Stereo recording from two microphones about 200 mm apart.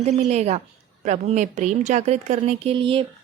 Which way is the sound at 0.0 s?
35° right (ahead or behind).